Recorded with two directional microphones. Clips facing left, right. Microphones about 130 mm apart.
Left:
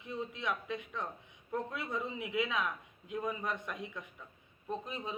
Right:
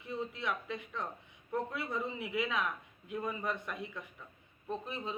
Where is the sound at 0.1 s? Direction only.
15° left (ahead or behind).